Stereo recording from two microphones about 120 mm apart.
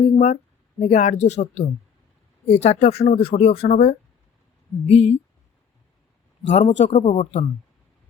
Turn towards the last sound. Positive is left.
turn(degrees=60)  # may be behind; listen again after turning